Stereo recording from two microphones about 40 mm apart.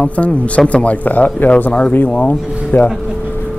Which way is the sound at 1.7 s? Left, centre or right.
Left.